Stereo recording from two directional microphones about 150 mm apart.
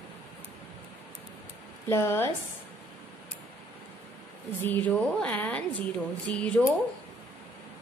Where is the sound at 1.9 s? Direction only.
15° left (ahead or behind).